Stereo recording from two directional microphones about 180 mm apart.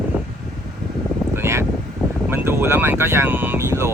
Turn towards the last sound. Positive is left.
turn(degrees=-15)  # may be behind; listen again after turning